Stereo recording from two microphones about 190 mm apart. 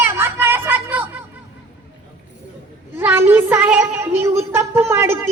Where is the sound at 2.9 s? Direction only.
10° right (ahead or behind).